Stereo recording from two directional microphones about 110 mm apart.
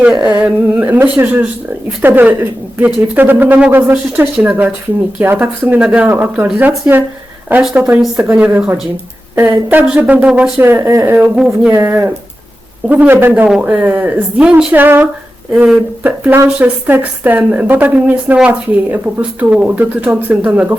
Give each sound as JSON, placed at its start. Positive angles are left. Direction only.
{"t": 0.3, "sound": "a woman's voice", "side_deg": -15}
{"t": 10.6, "sound": "speech", "side_deg": -20}
{"t": 11.3, "sound": "a sound", "side_deg": -5}
{"t": 11.7, "sound": "a woman's voice", "side_deg": -20}